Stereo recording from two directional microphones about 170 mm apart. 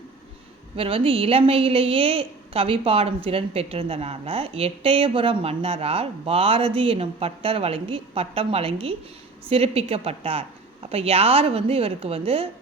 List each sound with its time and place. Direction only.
0.8 s a woman's voice: 30° right (ahead or behind)